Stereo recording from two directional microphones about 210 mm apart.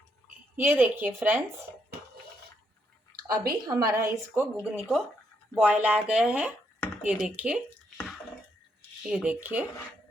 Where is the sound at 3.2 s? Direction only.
45° right (ahead or behind).